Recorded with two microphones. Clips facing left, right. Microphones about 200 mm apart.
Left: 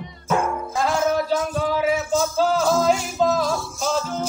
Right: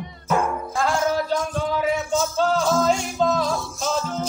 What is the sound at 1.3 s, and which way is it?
Music, 5° left (ahead or behind).